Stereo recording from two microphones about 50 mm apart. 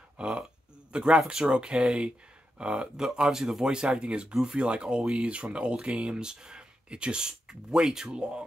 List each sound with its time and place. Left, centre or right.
0.2 s speech: centre